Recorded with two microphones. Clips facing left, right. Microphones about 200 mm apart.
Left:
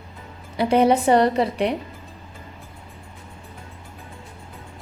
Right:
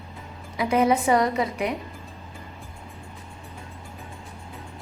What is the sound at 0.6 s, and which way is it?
A woman's voice, 30° left (ahead or behind).